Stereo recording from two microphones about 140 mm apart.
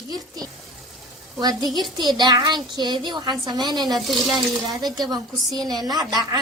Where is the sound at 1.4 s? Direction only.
30° right (ahead or behind).